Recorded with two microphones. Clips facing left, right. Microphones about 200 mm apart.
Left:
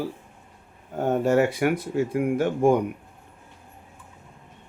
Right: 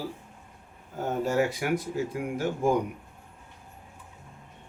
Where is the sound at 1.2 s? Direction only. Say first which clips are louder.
Left 5 dB; 60° left (ahead or behind).